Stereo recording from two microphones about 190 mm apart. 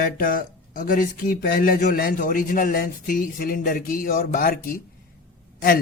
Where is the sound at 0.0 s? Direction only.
45° left (ahead or behind).